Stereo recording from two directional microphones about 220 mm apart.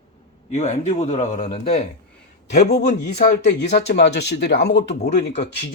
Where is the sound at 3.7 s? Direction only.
50° left (ahead or behind).